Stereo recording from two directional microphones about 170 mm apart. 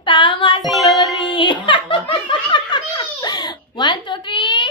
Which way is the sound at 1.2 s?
30° left (ahead or behind).